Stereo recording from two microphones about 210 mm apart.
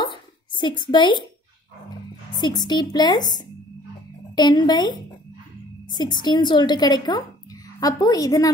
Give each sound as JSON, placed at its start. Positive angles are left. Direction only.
{"t": 0.0, "sound": "a sound", "side_deg": 20}
{"t": 2.3, "sound": "a woman's voice", "side_deg": 20}
{"t": 4.4, "sound": "a woman's voice", "side_deg": 20}